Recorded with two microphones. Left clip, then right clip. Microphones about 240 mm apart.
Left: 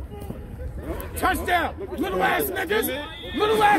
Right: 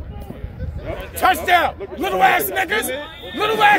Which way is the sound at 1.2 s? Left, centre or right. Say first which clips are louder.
Right 7 dB; right.